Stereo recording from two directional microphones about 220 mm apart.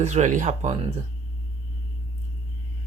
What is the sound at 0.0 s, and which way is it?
Speech, 30° right (ahead or behind).